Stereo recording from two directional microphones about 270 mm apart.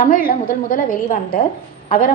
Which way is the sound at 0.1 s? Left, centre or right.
Left.